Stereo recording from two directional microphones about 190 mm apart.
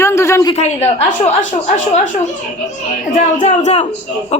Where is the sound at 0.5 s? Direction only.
35° left (ahead or behind).